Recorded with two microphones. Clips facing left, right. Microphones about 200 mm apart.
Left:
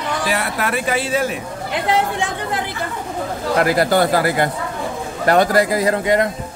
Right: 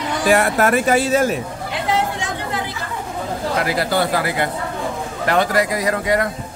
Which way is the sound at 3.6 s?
45° left (ahead or behind).